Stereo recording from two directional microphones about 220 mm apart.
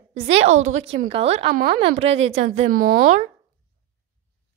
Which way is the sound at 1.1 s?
25° right (ahead or behind).